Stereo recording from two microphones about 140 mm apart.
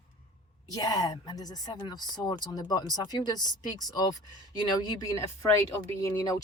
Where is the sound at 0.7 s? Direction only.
25° left (ahead or behind).